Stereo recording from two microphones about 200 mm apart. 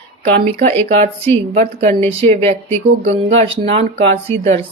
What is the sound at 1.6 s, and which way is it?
Speech, 35° right (ahead or behind).